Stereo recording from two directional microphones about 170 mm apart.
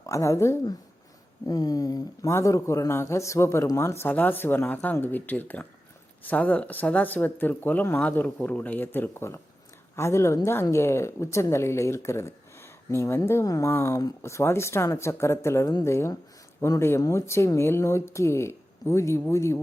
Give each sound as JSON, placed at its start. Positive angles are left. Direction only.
{"t": 0.0, "sound": "speech", "side_deg": 20}